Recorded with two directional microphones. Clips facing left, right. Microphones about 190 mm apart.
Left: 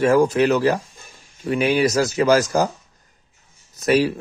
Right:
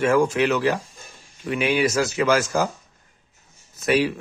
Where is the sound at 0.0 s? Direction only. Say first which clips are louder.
Left 3 dB; 35° left (ahead or behind).